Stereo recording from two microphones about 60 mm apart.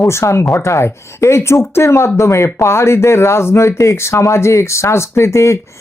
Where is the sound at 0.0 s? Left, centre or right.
Left.